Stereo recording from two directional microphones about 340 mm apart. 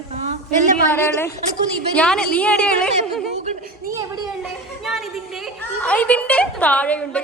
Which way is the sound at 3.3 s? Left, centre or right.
Centre.